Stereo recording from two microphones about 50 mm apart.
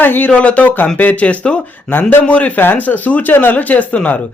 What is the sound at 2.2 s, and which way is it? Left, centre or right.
Speech, left.